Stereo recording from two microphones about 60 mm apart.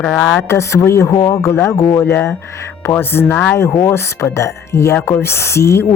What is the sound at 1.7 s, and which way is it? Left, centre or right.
Speech, left.